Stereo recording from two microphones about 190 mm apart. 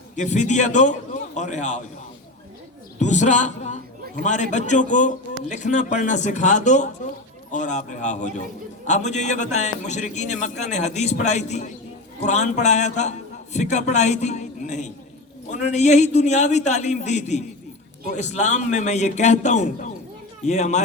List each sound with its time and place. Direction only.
0.2 s a man's voice: 40° left (ahead or behind)
3.0 s a man's voice: 40° left (ahead or behind)